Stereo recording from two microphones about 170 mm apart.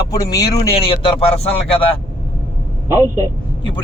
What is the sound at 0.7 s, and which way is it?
A man's voice, 30° left (ahead or behind).